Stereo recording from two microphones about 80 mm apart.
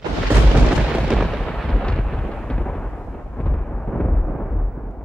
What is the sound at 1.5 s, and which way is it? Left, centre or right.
Thunder, centre.